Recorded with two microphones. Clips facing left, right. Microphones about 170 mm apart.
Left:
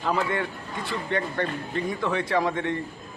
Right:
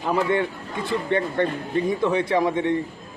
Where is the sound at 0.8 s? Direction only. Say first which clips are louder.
Right 5 dB; 20° right (ahead or behind).